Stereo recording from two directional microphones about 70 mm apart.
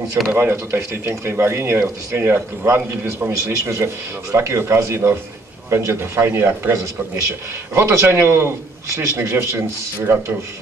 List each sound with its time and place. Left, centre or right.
0.3 s speech: right